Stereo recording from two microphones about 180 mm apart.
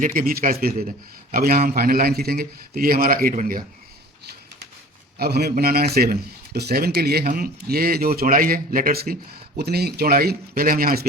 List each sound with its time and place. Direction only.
0.0 s a man's voice: 50° right (ahead or behind)
5.1 s speech: 60° right (ahead or behind)